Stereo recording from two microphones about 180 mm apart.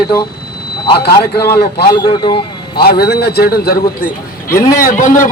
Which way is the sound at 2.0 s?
30° left (ahead or behind).